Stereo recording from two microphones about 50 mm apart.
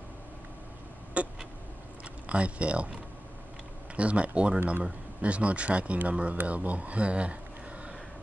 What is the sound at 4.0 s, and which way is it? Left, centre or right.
Speech, right.